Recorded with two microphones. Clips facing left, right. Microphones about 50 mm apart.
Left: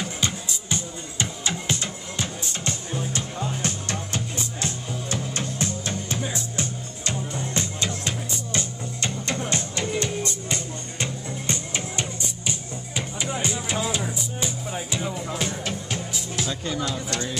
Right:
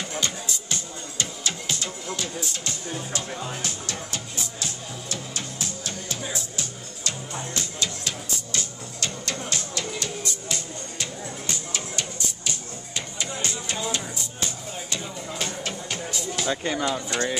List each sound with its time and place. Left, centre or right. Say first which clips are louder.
0.2 s music: left 1 dB; centre
15.3 s music: left 2 dB; centre
16.4 s speech: right 5 dB; right